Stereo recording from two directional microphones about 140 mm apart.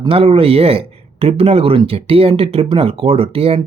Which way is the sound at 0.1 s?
45° right (ahead or behind).